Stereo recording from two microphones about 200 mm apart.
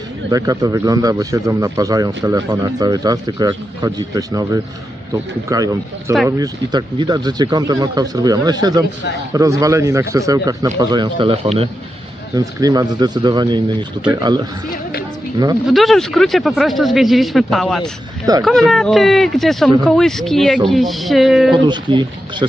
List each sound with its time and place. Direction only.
0.3 s a man's voice: 20° right (ahead or behind)
12.3 s a man's voice: 15° right (ahead or behind)
15.6 s speech: centre (ahead or behind)
21.6 s a man's voice: 25° right (ahead or behind)